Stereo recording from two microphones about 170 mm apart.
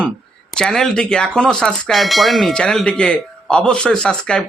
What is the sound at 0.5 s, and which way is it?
Speech, 5° left (ahead or behind).